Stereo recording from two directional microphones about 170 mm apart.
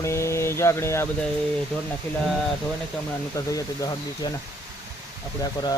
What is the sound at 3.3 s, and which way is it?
Mantra, 20° left (ahead or behind).